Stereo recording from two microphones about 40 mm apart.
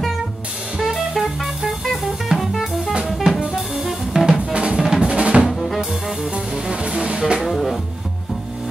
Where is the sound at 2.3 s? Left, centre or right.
Centre.